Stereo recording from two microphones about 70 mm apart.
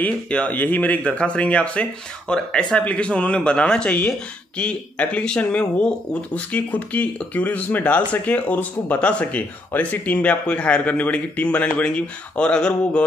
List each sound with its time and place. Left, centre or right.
0.0 s speech: centre